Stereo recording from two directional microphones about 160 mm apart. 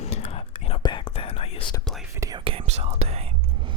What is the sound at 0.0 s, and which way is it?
Whispering, 45° left (ahead or behind).